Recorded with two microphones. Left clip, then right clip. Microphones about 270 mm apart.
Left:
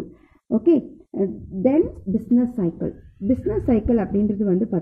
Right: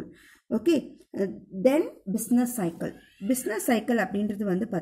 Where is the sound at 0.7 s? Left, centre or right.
Right.